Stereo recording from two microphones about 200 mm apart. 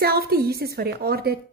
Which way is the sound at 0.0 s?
50° right (ahead or behind).